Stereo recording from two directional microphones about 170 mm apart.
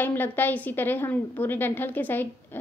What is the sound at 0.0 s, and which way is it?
A woman's voice, 10° left (ahead or behind).